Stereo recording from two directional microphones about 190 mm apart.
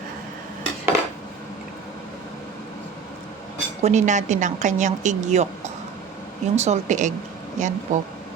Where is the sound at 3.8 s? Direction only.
35° right (ahead or behind).